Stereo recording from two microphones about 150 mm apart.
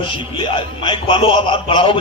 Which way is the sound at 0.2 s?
35° left (ahead or behind).